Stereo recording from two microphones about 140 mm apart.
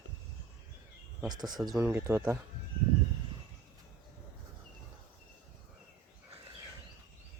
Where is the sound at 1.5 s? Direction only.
Centre (ahead or behind).